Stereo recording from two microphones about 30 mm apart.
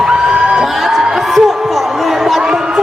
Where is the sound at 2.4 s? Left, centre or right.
Right.